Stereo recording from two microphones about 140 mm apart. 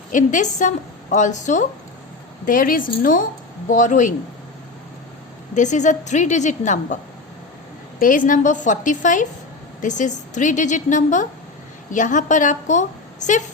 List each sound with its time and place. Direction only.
0.1 s a woman's voice: 65° left (ahead or behind)
2.5 s a woman's voice: 80° left
3.7 s a woman's voice: 65° left (ahead or behind)
5.5 s a woman's voice: 60° left (ahead or behind)
7.9 s a woman's voice: 75° left (ahead or behind)